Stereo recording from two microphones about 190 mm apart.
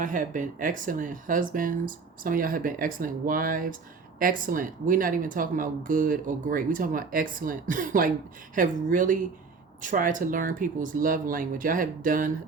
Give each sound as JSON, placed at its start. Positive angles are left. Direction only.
{"t": 0.0, "sound": "speech", "side_deg": -45}